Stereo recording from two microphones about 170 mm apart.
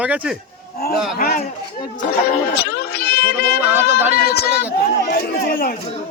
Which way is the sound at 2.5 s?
70° left (ahead or behind).